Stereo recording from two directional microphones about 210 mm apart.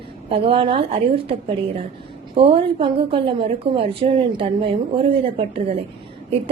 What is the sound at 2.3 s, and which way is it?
A woman's voice, 25° right (ahead or behind).